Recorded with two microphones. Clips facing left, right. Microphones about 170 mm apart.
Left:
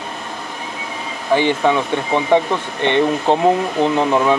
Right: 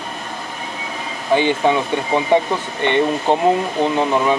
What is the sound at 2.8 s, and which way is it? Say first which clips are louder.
Speech: left 1 dB; 5° right (ahead or behind).